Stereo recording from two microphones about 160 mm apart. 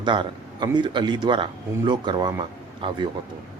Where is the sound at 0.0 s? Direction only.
30° right (ahead or behind).